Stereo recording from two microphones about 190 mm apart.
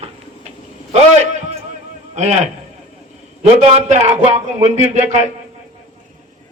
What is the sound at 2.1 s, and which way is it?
A man's voice, 35° right (ahead or behind).